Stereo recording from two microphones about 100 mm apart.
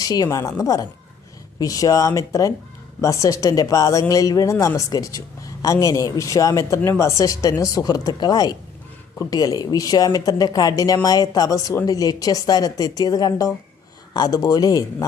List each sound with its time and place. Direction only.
0.0 s speech: 40° left (ahead or behind)